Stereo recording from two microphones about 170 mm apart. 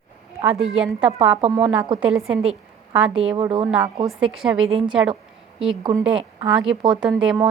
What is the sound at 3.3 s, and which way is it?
Speech, 30° right (ahead or behind).